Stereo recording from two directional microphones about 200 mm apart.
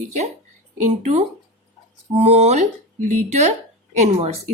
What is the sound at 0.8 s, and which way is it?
A woman's voice, 35° right (ahead or behind).